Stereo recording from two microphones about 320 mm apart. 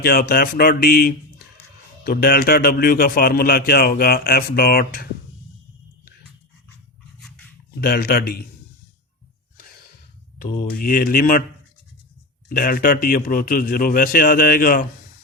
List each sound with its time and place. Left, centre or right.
0.0 s a man's voice: left
7.2 s a sound: centre
7.8 s a man's voice: left
10.3 s a man's voice: left
12.5 s a man's voice: left